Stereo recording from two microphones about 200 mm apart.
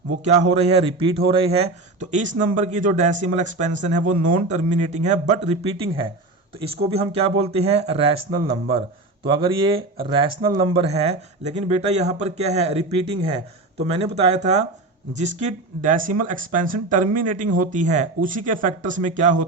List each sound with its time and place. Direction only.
0.3 s speech: 30° right (ahead or behind)